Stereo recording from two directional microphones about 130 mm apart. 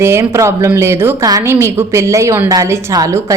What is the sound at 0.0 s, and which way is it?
A woman's voice, 20° right (ahead or behind).